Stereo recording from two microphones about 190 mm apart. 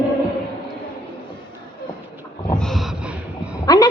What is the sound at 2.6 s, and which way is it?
Gasp, centre (ahead or behind).